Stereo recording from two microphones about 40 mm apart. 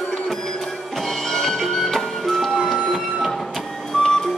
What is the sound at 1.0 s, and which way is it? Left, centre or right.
Music, centre.